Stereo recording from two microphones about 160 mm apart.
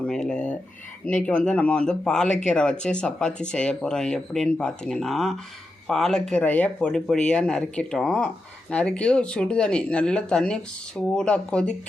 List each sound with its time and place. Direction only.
0.0 s speech: 5° left (ahead or behind)